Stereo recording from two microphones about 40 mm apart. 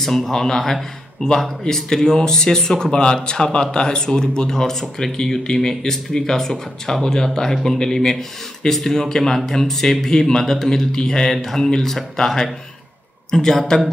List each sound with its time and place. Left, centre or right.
0.0 s speech: centre